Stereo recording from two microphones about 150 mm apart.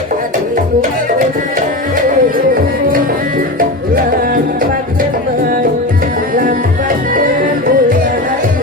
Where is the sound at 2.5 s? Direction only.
70° right (ahead or behind).